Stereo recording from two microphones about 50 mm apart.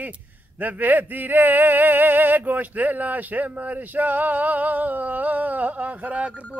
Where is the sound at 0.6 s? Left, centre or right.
Right.